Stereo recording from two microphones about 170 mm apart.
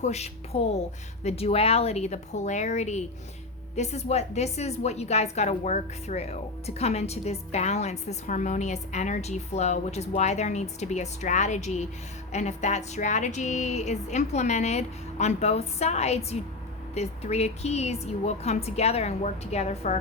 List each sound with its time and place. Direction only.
0.0 s a woman's voice: 40° left (ahead or behind)